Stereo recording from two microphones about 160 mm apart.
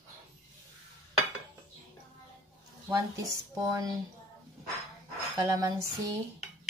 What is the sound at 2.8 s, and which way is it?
Speech, 15° right (ahead or behind).